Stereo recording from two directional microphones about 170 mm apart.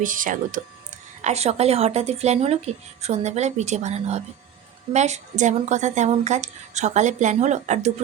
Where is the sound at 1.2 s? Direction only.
40° right (ahead or behind).